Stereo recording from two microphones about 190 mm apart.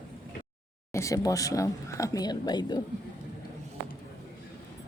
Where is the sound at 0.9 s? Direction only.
15° left (ahead or behind).